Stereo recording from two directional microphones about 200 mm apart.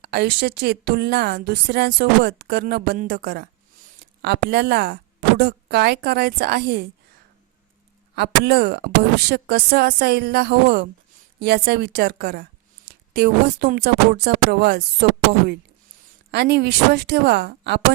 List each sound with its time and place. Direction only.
0.0 s a woman's voice: 55° right (ahead or behind)
8.1 s a woman's voice: 55° right (ahead or behind)
16.3 s speech: 55° right (ahead or behind)